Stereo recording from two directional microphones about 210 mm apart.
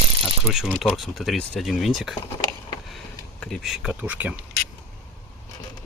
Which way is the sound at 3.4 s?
Centre (ahead or behind).